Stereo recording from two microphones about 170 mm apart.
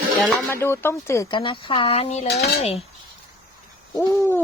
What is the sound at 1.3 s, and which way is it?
Speech, 30° left (ahead or behind).